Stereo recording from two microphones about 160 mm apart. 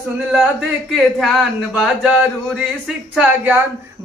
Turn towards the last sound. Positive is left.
turn(degrees=-10)  # may be behind; listen again after turning